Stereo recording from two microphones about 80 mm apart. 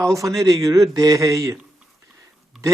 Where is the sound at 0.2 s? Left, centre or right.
Right.